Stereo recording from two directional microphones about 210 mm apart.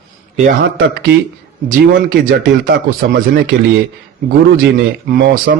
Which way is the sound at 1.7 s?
45° right (ahead or behind).